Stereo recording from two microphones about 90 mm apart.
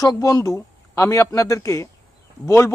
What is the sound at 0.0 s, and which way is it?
Speech, 40° left (ahead or behind).